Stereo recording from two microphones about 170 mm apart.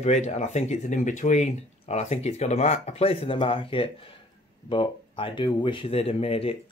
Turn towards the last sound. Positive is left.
turn(degrees=35)  # may be behind; listen again after turning